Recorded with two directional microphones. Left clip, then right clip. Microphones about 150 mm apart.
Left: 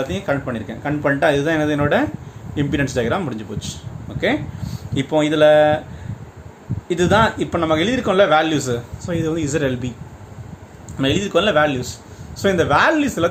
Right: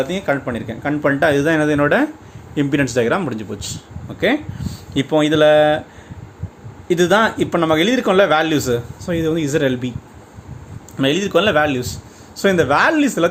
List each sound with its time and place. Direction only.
0.1 s a man's voice: 45° right (ahead or behind)
6.8 s a man's voice: 40° right (ahead or behind)
10.9 s a man's voice: 35° right (ahead or behind)